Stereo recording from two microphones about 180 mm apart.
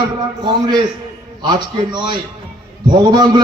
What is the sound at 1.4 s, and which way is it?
Speech, 25° right (ahead or behind).